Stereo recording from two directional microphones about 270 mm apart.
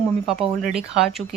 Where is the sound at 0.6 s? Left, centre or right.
Centre.